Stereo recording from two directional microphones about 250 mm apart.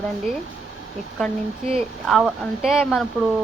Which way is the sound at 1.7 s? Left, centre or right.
Centre.